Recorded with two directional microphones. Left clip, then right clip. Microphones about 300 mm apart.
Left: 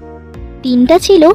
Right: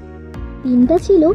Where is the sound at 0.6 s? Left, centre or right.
Left.